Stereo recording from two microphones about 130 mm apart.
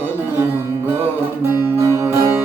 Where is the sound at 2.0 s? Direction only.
15° right (ahead or behind).